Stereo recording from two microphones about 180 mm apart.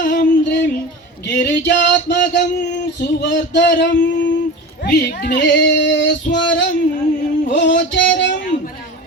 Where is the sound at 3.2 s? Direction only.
80° left.